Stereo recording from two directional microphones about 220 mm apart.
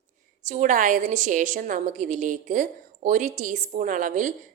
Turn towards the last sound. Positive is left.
turn(degrees=-35)  # may be behind; listen again after turning